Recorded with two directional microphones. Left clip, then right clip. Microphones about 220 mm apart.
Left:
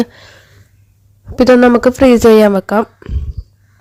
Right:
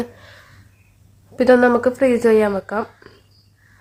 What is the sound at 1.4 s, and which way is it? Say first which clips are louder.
Speech: left 5 dB; 35° left (ahead or behind).